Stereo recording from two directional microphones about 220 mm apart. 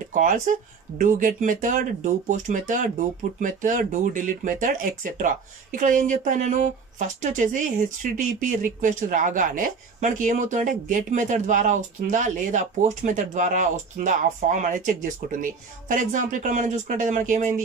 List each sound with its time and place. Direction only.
0.1 s speech: 35° right (ahead or behind)